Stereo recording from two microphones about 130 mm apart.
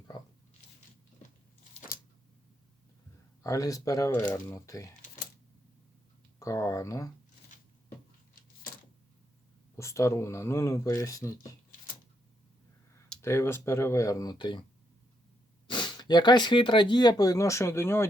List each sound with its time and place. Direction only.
3.4 s speech: 25° left (ahead or behind)
6.4 s a sound: 25° left (ahead or behind)
9.7 s speech: 20° left (ahead or behind)
13.2 s speech: 20° left (ahead or behind); by 14.6 s 35° left (ahead or behind)
15.6 s speech: 35° left (ahead or behind); by 18.1 s 20° left (ahead or behind)